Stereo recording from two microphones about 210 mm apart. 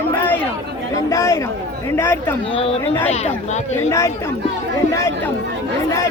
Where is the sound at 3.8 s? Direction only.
15° left (ahead or behind).